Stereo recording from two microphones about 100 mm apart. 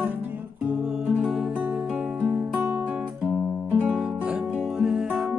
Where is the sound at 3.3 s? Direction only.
10° left (ahead or behind).